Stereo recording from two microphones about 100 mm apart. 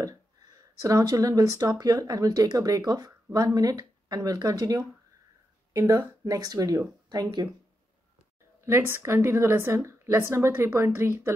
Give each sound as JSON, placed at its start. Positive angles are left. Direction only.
{"t": 0.7, "sound": "speech", "side_deg": -35}
{"t": 8.5, "sound": "a woman's voice", "side_deg": -25}